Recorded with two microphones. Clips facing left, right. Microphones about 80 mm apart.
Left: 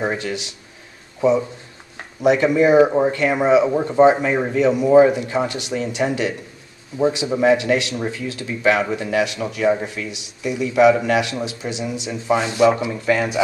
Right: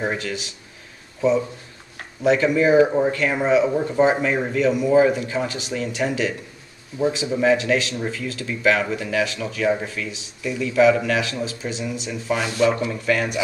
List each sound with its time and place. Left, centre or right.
0.0 s speech: centre
2.2 s speech: centre
5.0 s speech: centre
6.0 s speech: centre
7.3 s speech: centre
12.1 s speech: left